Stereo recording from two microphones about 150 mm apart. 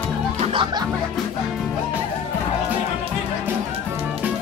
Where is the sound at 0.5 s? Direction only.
35° right (ahead or behind).